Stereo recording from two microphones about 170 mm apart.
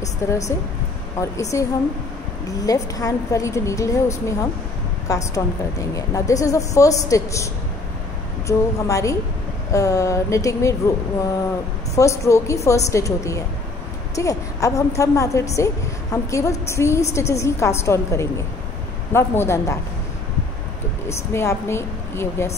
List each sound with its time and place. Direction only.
0.2 s a woman's voice: 15° left (ahead or behind)
8.5 s a woman's voice: 20° left (ahead or behind)
11.9 s a woman's voice: 20° left (ahead or behind)
21.1 s a woman's voice: 15° left (ahead or behind)